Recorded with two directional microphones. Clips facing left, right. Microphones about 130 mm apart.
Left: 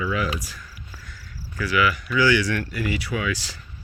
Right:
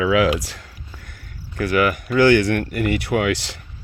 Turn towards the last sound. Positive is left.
turn(degrees=-65)  # may be behind; listen again after turning